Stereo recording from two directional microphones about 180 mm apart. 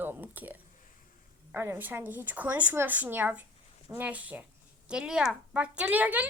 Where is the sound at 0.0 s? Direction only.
10° right (ahead or behind).